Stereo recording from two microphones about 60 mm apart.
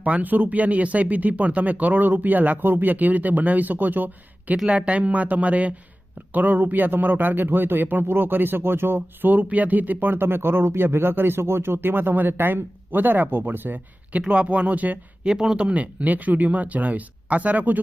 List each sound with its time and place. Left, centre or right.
0.0 s speech: right
15.2 s speech: centre; by 17.7 s right